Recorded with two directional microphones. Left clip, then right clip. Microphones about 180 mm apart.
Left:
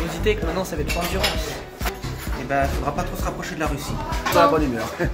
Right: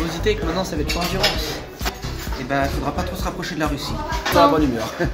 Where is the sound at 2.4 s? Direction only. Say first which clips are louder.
Even; centre (ahead or behind).